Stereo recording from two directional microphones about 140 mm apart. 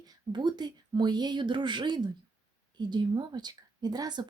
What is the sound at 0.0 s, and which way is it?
Speech, 30° right (ahead or behind).